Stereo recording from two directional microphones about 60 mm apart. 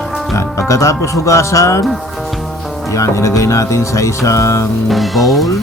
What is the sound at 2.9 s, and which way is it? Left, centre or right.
Music, left.